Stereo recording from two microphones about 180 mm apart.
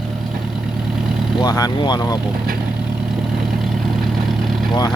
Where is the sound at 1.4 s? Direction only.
20° left (ahead or behind).